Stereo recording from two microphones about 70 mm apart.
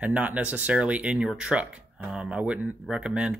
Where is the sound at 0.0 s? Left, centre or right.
Centre.